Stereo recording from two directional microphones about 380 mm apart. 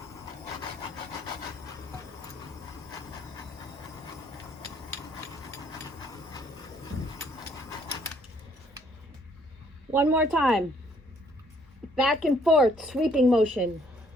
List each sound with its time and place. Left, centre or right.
0.8 s wood: centre
6.0 s a sound: centre
9.9 s a woman's voice: centre
11.9 s a woman's voice: centre